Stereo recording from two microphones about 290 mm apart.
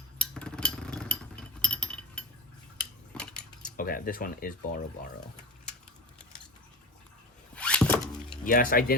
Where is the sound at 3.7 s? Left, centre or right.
Left.